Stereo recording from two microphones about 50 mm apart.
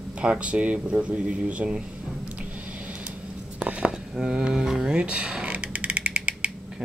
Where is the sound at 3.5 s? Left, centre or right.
Right.